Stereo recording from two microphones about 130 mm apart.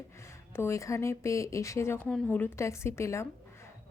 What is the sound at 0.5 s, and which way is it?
Speech, 20° left (ahead or behind).